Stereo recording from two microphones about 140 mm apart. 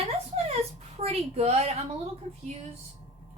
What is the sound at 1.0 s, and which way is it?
Speech, 45° right (ahead or behind).